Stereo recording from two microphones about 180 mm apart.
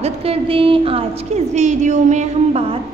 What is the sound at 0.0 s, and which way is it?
A woman's voice, 35° right (ahead or behind).